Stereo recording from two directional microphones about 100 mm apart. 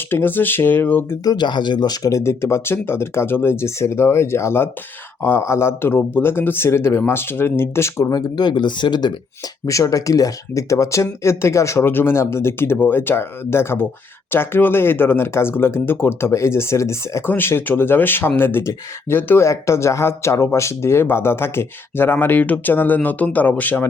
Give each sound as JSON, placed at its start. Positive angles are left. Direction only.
{"t": 0.1, "sound": "speech", "side_deg": 20}
{"t": 1.2, "sound": "speech", "side_deg": 45}
{"t": 9.6, "sound": "speech", "side_deg": 35}